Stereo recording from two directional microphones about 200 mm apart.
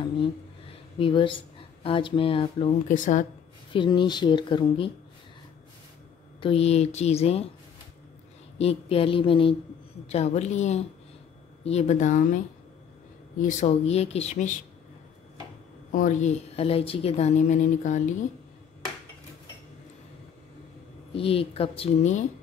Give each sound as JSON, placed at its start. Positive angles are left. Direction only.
{"t": 0.9, "sound": "speech", "side_deg": 25}
{"t": 2.9, "sound": "a woman's voice", "side_deg": 40}
{"t": 3.7, "sound": "speech", "side_deg": 25}
{"t": 6.4, "sound": "a woman's voice", "side_deg": 30}
{"t": 8.5, "sound": "a woman's voice", "side_deg": 30}
{"t": 13.4, "sound": "a woman's voice", "side_deg": 35}
{"t": 15.9, "sound": "a woman's voice", "side_deg": 40}
{"t": 21.1, "sound": "speech", "side_deg": 30}